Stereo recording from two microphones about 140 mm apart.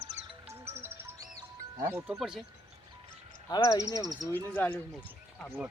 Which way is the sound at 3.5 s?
25° left (ahead or behind).